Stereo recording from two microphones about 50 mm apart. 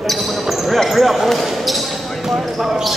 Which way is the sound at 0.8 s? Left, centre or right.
Centre.